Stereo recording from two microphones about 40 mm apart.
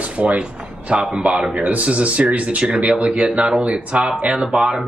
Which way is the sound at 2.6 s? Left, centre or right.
Right.